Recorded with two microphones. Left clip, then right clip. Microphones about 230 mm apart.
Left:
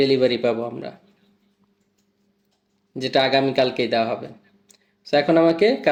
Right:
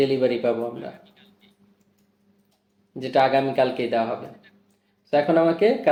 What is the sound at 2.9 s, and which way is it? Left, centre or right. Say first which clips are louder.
Speech: left 1 dB; left.